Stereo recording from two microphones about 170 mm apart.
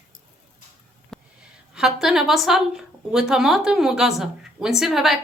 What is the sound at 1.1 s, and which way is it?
Sniff, centre (ahead or behind).